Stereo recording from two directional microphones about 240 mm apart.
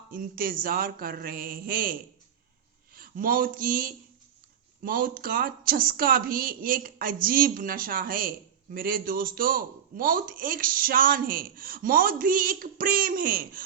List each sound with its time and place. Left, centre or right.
0.1 s a man's voice: right